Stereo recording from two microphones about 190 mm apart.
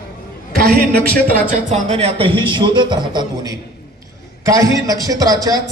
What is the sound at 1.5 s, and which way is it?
A man's voice, 35° right (ahead or behind).